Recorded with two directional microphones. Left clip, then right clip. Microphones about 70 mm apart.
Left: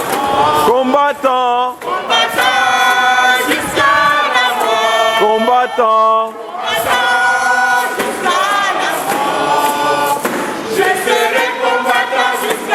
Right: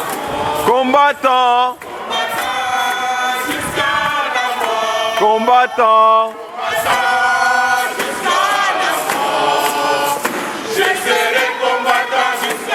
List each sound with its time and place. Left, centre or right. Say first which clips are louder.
0.7 s speech: even; right
4.4 s choir: left 4 dB; centre
5.2 s speech: even; right
6.9 s choir: left 2 dB; centre
8.4 s a sound: left 1 dB; centre
11.1 s music: left 1 dB; centre